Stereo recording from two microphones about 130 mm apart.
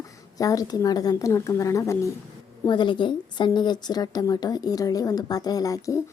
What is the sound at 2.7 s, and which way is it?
Speech, 35° left (ahead or behind).